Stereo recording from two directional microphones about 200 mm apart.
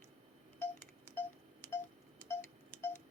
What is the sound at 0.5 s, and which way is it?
Telephone dialing, 10° left (ahead or behind).